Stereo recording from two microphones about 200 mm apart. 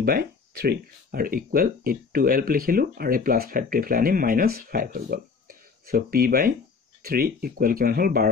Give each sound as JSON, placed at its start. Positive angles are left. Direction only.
{"t": 0.0, "sound": "speech", "side_deg": -50}